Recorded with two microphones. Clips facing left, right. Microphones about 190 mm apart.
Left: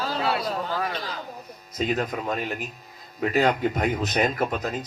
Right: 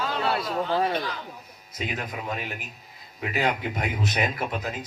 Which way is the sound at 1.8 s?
45° left (ahead or behind).